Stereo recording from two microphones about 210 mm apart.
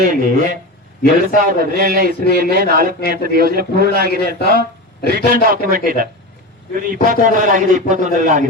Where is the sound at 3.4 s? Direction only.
45° right (ahead or behind).